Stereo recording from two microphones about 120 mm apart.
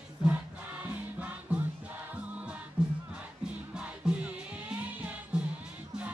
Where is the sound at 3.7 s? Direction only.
5° right (ahead or behind).